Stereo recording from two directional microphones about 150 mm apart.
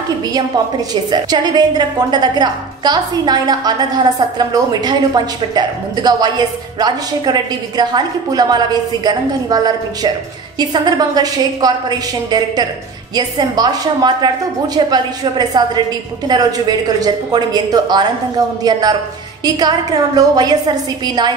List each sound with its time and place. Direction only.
1.1 s a woman's voice: 30° right (ahead or behind)
20.2 s a woman's voice: 25° right (ahead or behind)